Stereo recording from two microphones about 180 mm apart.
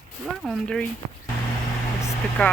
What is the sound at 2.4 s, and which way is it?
Speech, 5° left (ahead or behind).